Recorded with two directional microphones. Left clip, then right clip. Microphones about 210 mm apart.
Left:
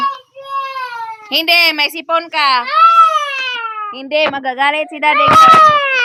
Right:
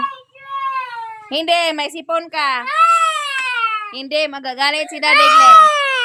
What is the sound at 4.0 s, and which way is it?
A woman's voice, centre (ahead or behind).